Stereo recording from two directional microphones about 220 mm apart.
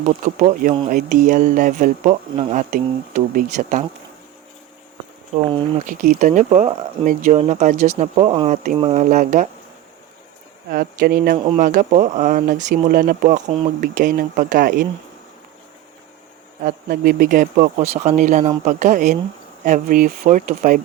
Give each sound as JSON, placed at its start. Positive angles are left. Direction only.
{"t": 0.2, "sound": "speech", "side_deg": -35}
{"t": 5.5, "sound": "speech", "side_deg": -20}
{"t": 5.8, "sound": "speech", "side_deg": -35}
{"t": 10.7, "sound": "speech", "side_deg": -45}
{"t": 16.6, "sound": "speech", "side_deg": -40}